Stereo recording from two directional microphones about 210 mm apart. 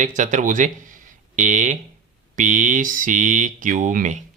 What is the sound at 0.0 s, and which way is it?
Speech, 35° right (ahead or behind).